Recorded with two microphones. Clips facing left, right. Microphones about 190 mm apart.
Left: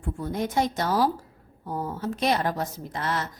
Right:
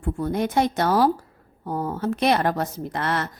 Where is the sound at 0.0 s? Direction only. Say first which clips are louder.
Right 5 dB; 65° right (ahead or behind).